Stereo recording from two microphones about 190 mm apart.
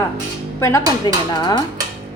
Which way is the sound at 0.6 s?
15° left (ahead or behind).